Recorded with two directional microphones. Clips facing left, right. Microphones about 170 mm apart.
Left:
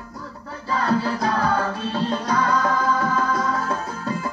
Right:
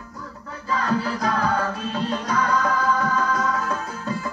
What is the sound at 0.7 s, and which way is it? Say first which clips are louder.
Music: left 2 dB; 35° left (ahead or behind).